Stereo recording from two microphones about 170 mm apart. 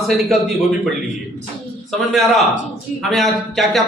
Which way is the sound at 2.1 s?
Centre (ahead or behind).